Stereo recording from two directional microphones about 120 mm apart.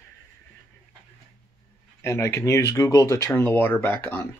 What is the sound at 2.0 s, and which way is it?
Speech, 20° left (ahead or behind).